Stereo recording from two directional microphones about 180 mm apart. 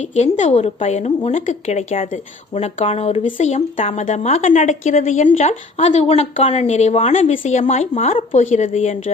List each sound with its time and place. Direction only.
0.2 s speech: 40° left (ahead or behind)